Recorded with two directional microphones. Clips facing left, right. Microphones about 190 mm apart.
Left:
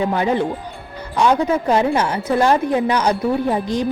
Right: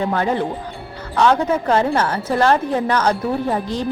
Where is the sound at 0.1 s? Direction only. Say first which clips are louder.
Left 1 dB; 15° left (ahead or behind).